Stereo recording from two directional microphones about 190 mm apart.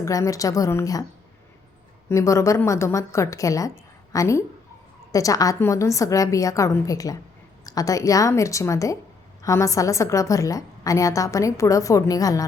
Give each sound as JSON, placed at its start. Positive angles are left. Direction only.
{"t": 0.0, "sound": "a woman's voice", "side_deg": 15}
{"t": 2.0, "sound": "a woman's voice", "side_deg": 15}